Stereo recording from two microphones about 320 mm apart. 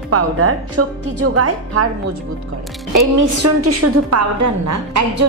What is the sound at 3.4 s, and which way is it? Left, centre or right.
A woman's voice, right.